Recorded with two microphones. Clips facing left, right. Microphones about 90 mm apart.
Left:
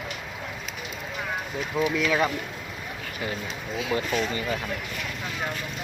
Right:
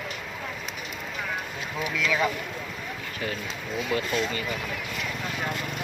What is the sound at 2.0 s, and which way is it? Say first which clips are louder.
Speech: right 1 dB; 20° left (ahead or behind).